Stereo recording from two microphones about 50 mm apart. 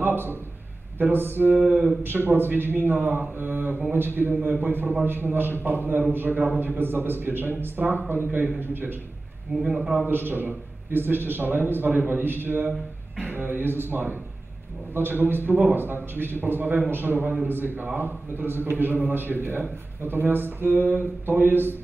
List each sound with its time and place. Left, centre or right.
0.0 s a sound: right
0.9 s a man's voice: right
1.6 s speech: right
2.0 s a man's voice: right
10.0 s a man's voice: right